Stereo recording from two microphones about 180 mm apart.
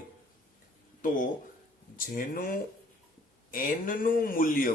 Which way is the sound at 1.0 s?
50° left (ahead or behind).